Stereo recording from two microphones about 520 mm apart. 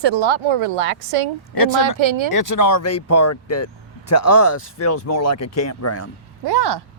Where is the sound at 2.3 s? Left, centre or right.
Left.